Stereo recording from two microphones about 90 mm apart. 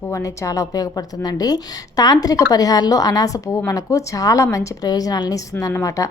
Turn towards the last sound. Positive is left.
turn(degrees=40)  # may be behind; listen again after turning